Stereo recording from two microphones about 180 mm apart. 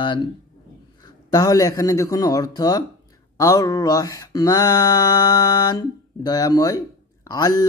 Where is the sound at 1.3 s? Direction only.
20° left (ahead or behind).